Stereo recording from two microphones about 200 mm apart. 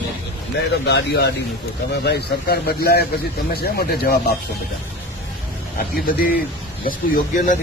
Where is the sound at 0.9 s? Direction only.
55° left (ahead or behind).